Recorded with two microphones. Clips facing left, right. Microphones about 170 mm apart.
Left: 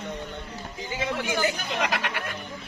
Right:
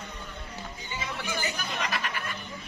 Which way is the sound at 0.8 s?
85° left.